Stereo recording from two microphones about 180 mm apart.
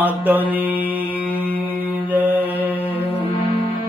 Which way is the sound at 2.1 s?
10° right (ahead or behind).